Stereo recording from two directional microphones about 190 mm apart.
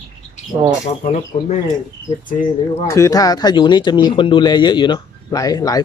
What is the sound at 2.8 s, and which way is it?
Speech, 15° left (ahead or behind).